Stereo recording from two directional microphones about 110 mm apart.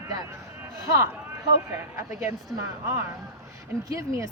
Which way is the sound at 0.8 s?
30° right (ahead or behind).